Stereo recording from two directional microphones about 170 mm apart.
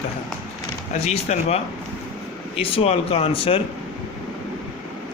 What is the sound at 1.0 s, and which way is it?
Speech, 40° left (ahead or behind).